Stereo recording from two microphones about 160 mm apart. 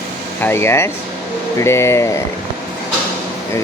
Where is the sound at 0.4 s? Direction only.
15° left (ahead or behind).